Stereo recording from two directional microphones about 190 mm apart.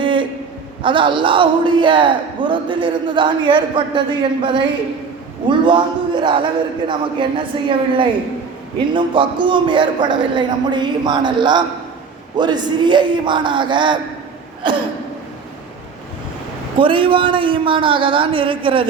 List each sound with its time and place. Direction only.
0.0 s a sound: 25° right (ahead or behind)
0.8 s a man's voice: 25° right (ahead or behind)
16.7 s a man's voice: 25° right (ahead or behind)